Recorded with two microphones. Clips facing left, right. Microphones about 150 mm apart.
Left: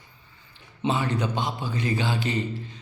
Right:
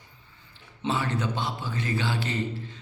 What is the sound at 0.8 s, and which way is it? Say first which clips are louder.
A man's voice: left 3 dB; 15° left (ahead or behind).